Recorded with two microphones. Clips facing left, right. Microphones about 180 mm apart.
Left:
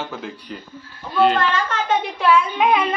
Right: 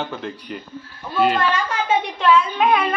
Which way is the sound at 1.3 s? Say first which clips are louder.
Even; 10° right (ahead or behind).